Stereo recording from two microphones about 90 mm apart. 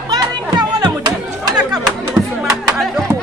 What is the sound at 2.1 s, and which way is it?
Music, 5° right (ahead or behind).